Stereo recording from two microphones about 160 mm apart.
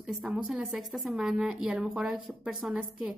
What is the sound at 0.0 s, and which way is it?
Speech, 5° right (ahead or behind).